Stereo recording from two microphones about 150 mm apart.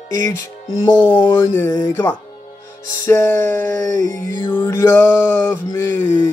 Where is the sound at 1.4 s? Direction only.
15° left (ahead or behind).